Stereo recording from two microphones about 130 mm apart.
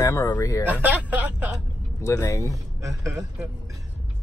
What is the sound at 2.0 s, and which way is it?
Speech, 25° left (ahead or behind).